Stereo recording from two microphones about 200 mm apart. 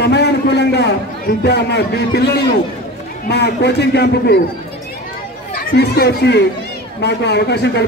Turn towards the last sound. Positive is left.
turn(degrees=55)  # may be behind; listen again after turning